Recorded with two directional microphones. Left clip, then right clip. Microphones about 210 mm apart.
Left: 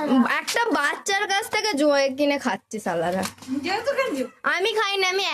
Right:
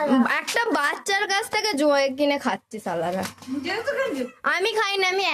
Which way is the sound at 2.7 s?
15° left (ahead or behind).